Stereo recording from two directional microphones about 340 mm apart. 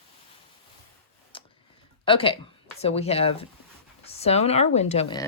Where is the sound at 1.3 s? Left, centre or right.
Centre.